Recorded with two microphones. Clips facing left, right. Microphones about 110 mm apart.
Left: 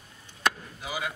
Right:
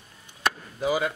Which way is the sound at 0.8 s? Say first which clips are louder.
Right 9 dB; 40° right (ahead or behind).